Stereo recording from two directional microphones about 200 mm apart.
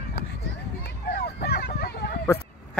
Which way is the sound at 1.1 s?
50° left (ahead or behind).